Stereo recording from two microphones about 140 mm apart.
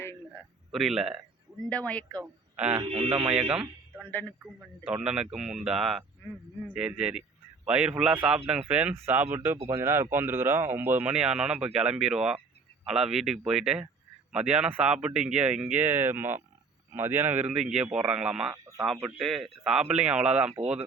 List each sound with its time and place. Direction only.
0.0 s a sound: 15° left (ahead or behind)
0.7 s speech: centre (ahead or behind)
1.7 s speech: 10° left (ahead or behind)
2.2 s speech: 10° right (ahead or behind)
2.8 s a man's voice: 40° right (ahead or behind)
3.5 s a sound: 5° right (ahead or behind)
4.1 s speech: 10° left (ahead or behind)
4.9 s a man's voice: 5° right (ahead or behind)
20.6 s speech: 50° right (ahead or behind)